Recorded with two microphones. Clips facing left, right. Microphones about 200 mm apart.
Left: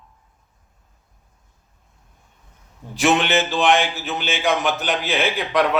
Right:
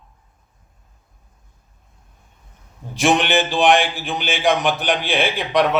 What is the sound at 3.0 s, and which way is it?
Speech, 15° right (ahead or behind).